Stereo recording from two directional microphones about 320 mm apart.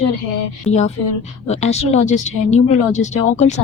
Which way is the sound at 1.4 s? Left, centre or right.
Centre.